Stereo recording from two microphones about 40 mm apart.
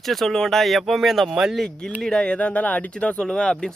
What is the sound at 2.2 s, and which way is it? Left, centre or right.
Speech, left.